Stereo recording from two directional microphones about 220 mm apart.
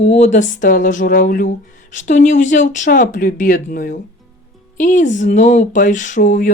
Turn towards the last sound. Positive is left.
turn(degrees=35)  # may be behind; listen again after turning